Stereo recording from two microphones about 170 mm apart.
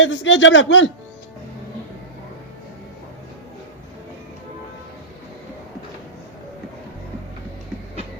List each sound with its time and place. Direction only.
0.0 s a man's voice: 90° left